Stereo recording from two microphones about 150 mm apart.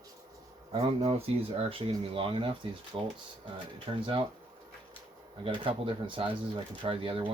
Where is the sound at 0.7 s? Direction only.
45° right (ahead or behind).